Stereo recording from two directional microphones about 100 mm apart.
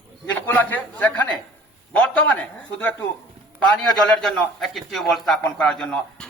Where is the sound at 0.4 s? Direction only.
15° left (ahead or behind).